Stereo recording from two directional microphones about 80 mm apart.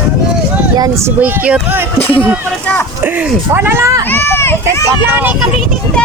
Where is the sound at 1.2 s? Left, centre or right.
Centre.